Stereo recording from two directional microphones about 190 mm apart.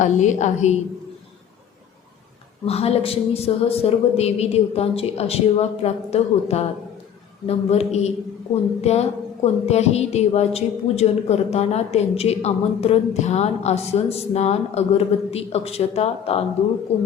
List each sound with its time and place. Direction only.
0.0 s a woman's voice: 40° left (ahead or behind)
2.6 s a woman's voice: 35° left (ahead or behind)